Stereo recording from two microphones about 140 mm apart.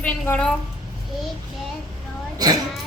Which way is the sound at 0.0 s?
10° left (ahead or behind).